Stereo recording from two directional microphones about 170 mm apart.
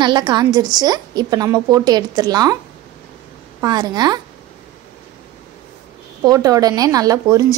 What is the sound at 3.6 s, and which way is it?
Speech, 25° right (ahead or behind).